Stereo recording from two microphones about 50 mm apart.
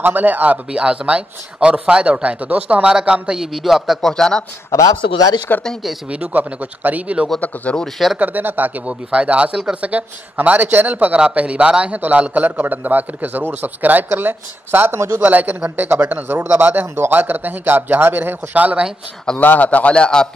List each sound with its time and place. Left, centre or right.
0.0 s a man's voice: right
0.7 s speech: centre
2.8 s speech: centre
4.1 s speech: centre
4.7 s speech: left
5.5 s speech: left
6.0 s a man's voice: right
7.3 s a man's voice: left
8.2 s a man's voice: right
8.8 s a man's voice: right
11.1 s a man's voice: right
15.0 s a man's voice: right
18.5 s a man's voice: right
19.3 s a man's voice: left; by 20.2 s centre